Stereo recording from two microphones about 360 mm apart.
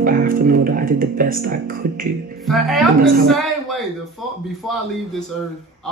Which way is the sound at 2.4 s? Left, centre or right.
Centre.